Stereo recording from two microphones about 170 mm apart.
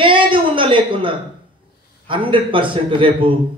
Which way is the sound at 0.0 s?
30° right (ahead or behind).